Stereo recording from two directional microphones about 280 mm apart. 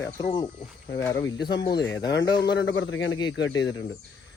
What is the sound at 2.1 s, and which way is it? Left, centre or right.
A man's voice, left.